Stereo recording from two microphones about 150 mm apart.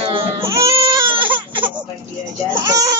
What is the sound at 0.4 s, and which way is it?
Baby cry, 20° right (ahead or behind).